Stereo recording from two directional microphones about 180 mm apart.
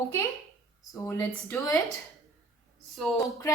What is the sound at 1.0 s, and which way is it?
Speech, 15° left (ahead or behind).